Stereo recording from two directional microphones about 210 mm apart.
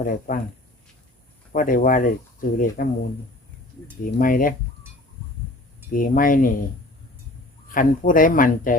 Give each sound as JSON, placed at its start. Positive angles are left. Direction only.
{"t": 0.0, "sound": "speech", "side_deg": 40}
{"t": 1.5, "sound": "speech", "side_deg": 40}
{"t": 4.0, "sound": "speech", "side_deg": 40}
{"t": 5.9, "sound": "speech", "side_deg": 40}
{"t": 7.7, "sound": "speech", "side_deg": 40}